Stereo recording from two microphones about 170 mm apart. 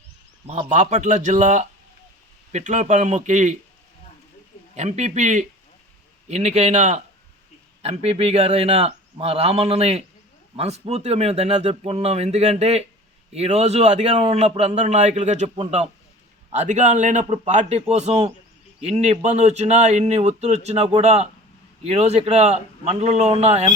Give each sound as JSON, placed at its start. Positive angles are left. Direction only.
{"t": 0.7, "sound": "a man's voice", "side_deg": -45}
{"t": 4.7, "sound": "a man's voice", "side_deg": -40}